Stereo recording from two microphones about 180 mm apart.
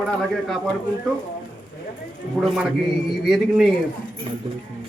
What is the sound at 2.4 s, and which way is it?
Speech, centre (ahead or behind).